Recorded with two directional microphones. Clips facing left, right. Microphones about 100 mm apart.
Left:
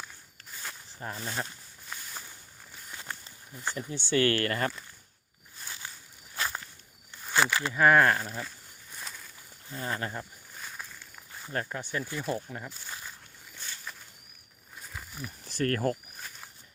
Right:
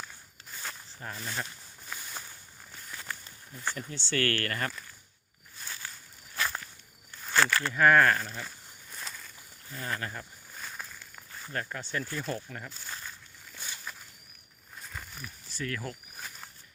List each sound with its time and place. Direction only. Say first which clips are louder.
0.9 s speech: left 5 dB; 25° left (ahead or behind)
1.9 s a sound: right 1 dB; 5° right (ahead or behind)
2.9 s speech: even; 20° left (ahead or behind)
5.6 s walk: even; 15° left (ahead or behind)
7.3 s speech: even; 15° left (ahead or behind)
8.4 s walk: right 1 dB; centre (ahead or behind)
9.6 s speech: left 2 dB; 25° left (ahead or behind)
10.5 s a sound: right 3 dB; centre (ahead or behind)
11.3 s a sound: even; 10° left (ahead or behind)
11.7 s speech: left 1 dB; 15° left (ahead or behind)
12.9 s walk: even; 10° left (ahead or behind)
13.6 s walk: right 1 dB; 10° right (ahead or behind)
14.8 s a sound: even; 5° left (ahead or behind)
15.4 s speech: left 9 dB; 55° left (ahead or behind)